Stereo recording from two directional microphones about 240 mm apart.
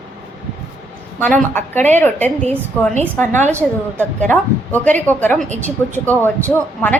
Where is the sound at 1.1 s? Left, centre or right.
Centre.